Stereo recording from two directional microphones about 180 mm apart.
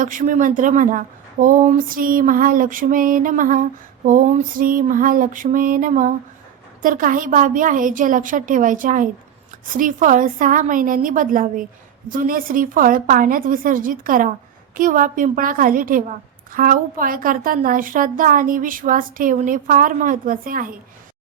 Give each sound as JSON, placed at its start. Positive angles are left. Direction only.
{"t": 0.0, "sound": "a woman's voice", "side_deg": -45}